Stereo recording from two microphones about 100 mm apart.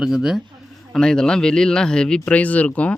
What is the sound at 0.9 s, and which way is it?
Speech, 5° left (ahead or behind).